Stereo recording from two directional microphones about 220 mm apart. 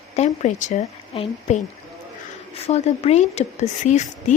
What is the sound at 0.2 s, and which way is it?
Speech, 30° left (ahead or behind).